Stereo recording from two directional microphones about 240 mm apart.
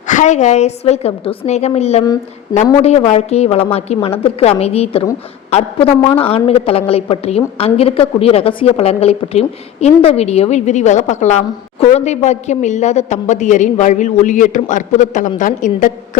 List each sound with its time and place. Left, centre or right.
0.1 s a woman's voice: left